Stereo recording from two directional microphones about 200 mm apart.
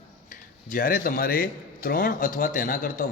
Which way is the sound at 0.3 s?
45° left (ahead or behind).